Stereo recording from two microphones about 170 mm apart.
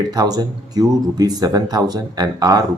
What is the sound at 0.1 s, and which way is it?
Speech, 25° right (ahead or behind).